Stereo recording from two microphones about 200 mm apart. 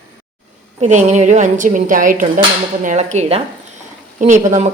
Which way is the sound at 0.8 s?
35° right (ahead or behind).